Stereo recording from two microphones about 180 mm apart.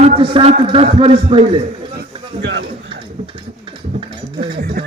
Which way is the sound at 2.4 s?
75° right (ahead or behind).